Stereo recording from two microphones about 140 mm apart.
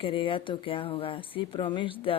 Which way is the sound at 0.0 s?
40° left (ahead or behind).